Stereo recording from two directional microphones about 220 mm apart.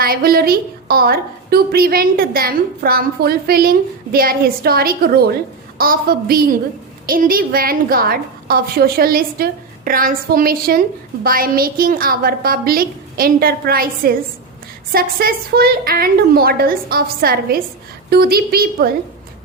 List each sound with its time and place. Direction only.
0.0 s a woman's voice: 40° right (ahead or behind)